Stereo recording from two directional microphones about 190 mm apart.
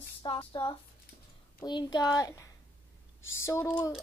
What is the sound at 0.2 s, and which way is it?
A woman's voice, 25° left (ahead or behind).